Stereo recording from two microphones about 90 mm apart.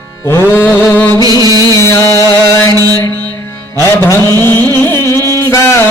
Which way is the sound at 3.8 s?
30° left (ahead or behind).